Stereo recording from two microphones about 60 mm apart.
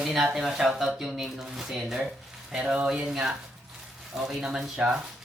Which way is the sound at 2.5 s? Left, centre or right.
Centre.